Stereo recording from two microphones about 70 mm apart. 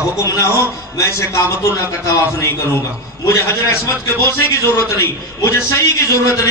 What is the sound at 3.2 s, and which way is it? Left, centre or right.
A man's voice, left.